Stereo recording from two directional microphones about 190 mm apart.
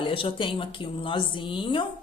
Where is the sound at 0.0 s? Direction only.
30° left (ahead or behind).